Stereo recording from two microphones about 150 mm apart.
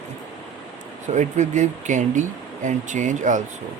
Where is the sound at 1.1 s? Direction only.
55° right (ahead or behind).